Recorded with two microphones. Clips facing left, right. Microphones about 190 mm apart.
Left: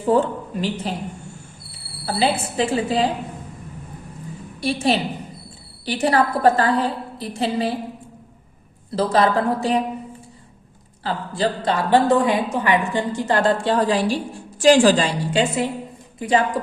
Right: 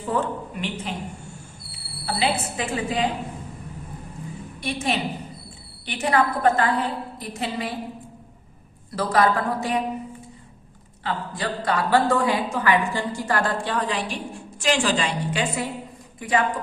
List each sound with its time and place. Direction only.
0.1 s a woman's voice: 30° left (ahead or behind)
2.0 s a woman's voice: 30° left (ahead or behind)
4.6 s a woman's voice: 30° left (ahead or behind)
8.9 s a woman's voice: 25° left (ahead or behind)
11.0 s a woman's voice: 30° left (ahead or behind)